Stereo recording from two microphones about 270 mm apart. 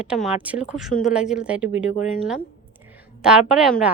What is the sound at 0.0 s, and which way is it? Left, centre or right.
A woman's voice, centre.